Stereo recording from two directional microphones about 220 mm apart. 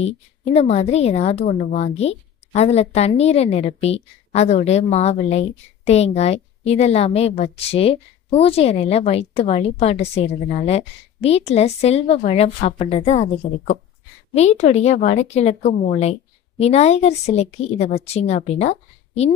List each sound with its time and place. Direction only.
0.0 s a woman's voice: 30° left (ahead or behind)